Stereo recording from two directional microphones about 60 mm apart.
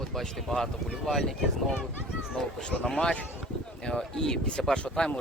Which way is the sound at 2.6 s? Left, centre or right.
Centre.